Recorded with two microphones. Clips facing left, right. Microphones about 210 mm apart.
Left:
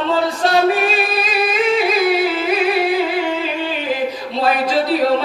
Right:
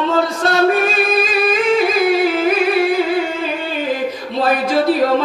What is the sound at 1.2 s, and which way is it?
Music, 50° right (ahead or behind).